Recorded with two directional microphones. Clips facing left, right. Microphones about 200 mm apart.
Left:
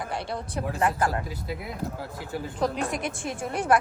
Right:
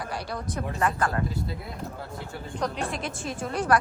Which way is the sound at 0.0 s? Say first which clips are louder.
Left 1 dB; 25° left (ahead or behind).